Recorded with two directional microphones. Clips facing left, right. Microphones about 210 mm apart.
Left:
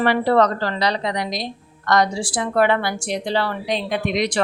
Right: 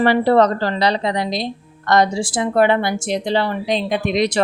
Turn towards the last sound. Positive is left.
turn(degrees=-25)  # may be behind; listen again after turning